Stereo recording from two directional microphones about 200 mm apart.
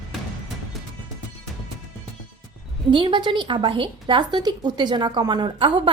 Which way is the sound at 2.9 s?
25° right (ahead or behind).